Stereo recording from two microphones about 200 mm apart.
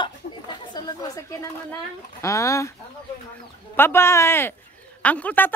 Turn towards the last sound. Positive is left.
turn(degrees=10)  # may be behind; listen again after turning